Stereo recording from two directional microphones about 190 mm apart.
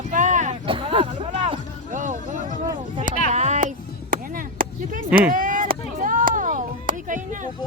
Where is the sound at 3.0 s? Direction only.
40° right (ahead or behind).